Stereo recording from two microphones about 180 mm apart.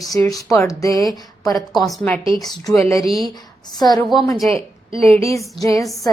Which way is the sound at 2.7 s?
15° left (ahead or behind).